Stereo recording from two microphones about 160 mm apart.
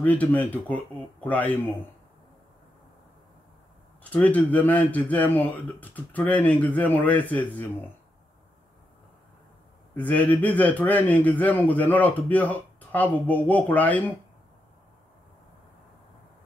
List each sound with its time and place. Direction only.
0.0 s a man's voice: 10° left (ahead or behind)
4.0 s a man's voice: 10° left (ahead or behind)
9.9 s a man's voice: 10° left (ahead or behind)